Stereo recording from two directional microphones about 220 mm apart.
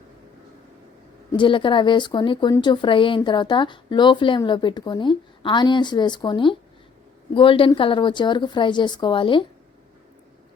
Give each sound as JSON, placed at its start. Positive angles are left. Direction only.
{"t": 1.3, "sound": "speech", "side_deg": 20}